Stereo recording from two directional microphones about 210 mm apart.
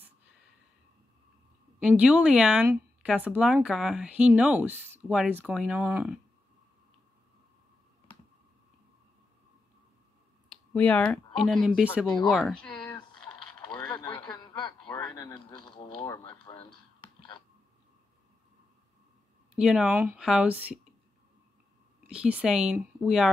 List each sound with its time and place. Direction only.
1.8 s speech: 5° right (ahead or behind)
10.7 s speech: 5° left (ahead or behind)
12.9 s typing: 20° left (ahead or behind)
13.7 s a sound: 20° left (ahead or behind)
19.5 s speech: 5° right (ahead or behind)
22.1 s speech: 5° right (ahead or behind)